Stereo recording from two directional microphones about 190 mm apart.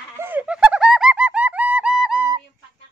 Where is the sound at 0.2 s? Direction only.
10° right (ahead or behind).